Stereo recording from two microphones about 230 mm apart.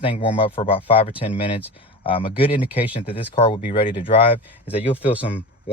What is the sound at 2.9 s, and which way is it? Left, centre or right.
Speech, left.